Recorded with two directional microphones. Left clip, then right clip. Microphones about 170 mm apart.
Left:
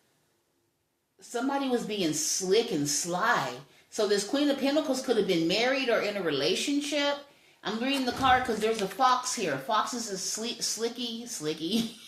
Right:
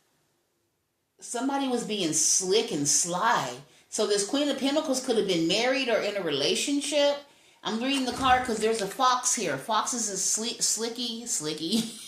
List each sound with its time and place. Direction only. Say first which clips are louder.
1.3 s speech: even; 20° right (ahead or behind)